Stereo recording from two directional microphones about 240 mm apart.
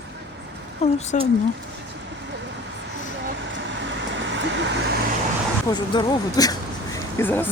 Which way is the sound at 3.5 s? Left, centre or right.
Right.